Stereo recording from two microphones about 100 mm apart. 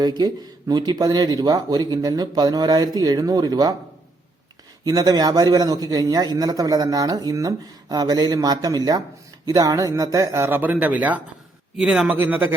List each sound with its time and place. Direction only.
0.0 s speech: 45° right (ahead or behind)
4.9 s speech: 40° right (ahead or behind); by 12.5 s 20° right (ahead or behind)